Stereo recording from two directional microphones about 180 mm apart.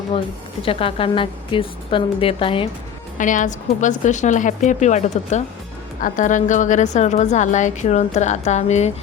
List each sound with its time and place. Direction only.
0.6 s a woman's voice: 30° left (ahead or behind)
3.2 s a woman's voice: 45° left (ahead or behind)